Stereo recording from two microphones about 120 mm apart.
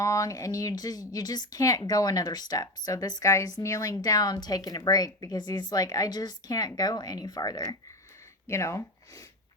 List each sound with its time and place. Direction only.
0.0 s speech: 25° left (ahead or behind)